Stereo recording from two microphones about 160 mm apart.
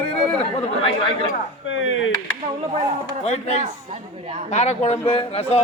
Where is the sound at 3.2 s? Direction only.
40° left (ahead or behind).